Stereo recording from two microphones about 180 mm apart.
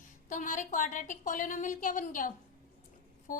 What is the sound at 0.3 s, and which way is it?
A woman's voice, 45° left (ahead or behind).